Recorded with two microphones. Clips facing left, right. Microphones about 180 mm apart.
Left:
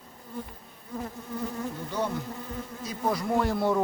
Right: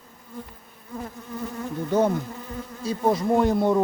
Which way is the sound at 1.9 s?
45° right (ahead or behind).